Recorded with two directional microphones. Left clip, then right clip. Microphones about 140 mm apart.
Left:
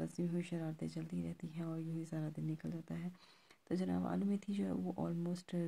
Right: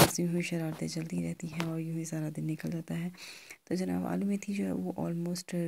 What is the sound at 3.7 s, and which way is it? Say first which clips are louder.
Speech: right 6 dB; 20° right (ahead or behind).